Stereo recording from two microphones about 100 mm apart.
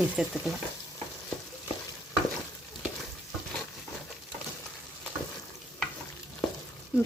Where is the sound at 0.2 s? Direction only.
5° right (ahead or behind).